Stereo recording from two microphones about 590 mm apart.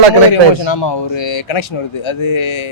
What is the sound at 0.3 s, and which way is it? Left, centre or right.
Speech, left.